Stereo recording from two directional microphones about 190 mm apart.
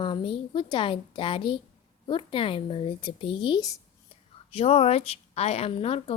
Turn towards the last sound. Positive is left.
turn(degrees=30)  # may be behind; listen again after turning